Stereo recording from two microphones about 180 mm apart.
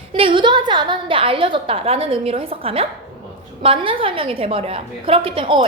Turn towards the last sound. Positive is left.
turn(degrees=-30)  # may be behind; listen again after turning